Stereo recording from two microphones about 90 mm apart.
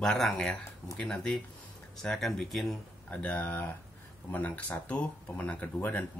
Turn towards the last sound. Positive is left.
turn(degrees=20)  # may be behind; listen again after turning